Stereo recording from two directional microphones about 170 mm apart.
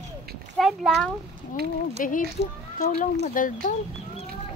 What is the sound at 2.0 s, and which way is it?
Speech, 55° left (ahead or behind).